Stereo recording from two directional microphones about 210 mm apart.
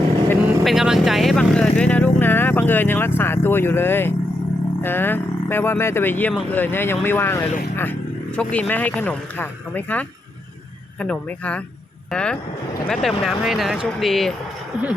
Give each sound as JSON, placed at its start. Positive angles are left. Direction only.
{"t": 0.3, "sound": "vehicle", "side_deg": 0}
{"t": 4.8, "sound": "speech", "side_deg": 10}